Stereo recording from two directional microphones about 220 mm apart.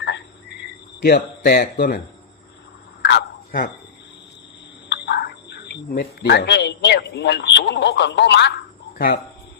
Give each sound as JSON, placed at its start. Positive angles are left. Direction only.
{"t": 0.0, "sound": "frog", "side_deg": 50}
{"t": 3.0, "sound": "a sound", "side_deg": 50}
{"t": 4.9, "sound": "speech", "side_deg": 50}